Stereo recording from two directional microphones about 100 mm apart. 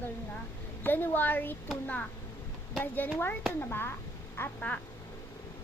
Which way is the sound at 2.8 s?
20° left (ahead or behind).